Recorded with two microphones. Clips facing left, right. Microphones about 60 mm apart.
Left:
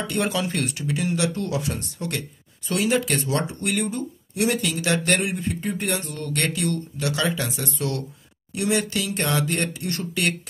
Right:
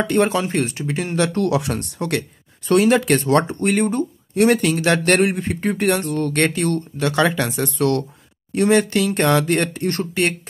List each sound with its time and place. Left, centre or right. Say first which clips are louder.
0.1 s speech: right 5 dB; right
1.1 s speech: right 8 dB; right
1.4 s speech: right 7 dB; right
2.7 s speech: right 8 dB; right
6.1 s speech: right 7 dB; right
8.5 s speech: right 8 dB; right
9.0 s speech: right 7 dB; right